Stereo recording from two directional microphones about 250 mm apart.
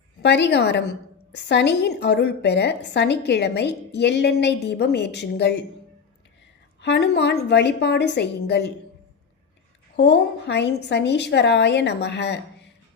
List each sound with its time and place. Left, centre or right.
0.2 s a woman's voice: left
6.8 s a woman's voice: left
9.9 s a woman's voice: left